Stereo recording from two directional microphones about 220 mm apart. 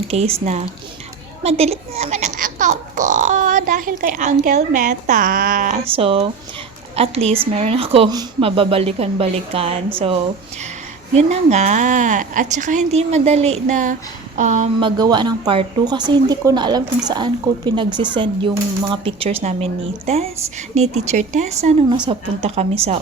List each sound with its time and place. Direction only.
0.1 s speech: 30° right (ahead or behind)
11.1 s speech: 30° right (ahead or behind)